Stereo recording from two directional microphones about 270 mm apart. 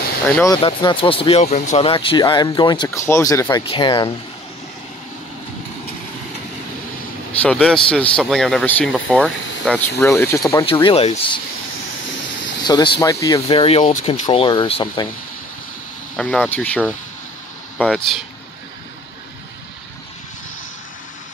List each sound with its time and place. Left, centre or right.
0.4 s speech: centre
7.4 s speech: centre
12.6 s speech: centre
16.2 s speech: centre